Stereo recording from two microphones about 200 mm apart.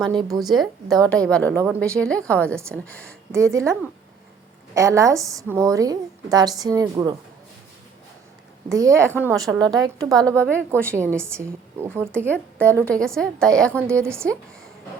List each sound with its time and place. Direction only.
0.1 s a woman's voice: 20° right (ahead or behind)
0.6 s a woman's voice: centre (ahead or behind)
3.3 s a woman's voice: 15° right (ahead or behind)
8.7 s a woman's voice: 15° right (ahead or behind)
12.3 s a woman's voice: 10° left (ahead or behind)
14.0 s a woman's voice: 15° right (ahead or behind)